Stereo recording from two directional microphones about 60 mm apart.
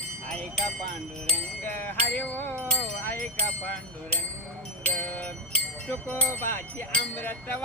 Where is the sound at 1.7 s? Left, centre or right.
Left.